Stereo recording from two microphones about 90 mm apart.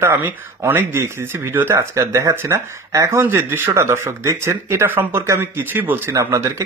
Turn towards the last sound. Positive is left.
turn(degrees=-30)  # may be behind; listen again after turning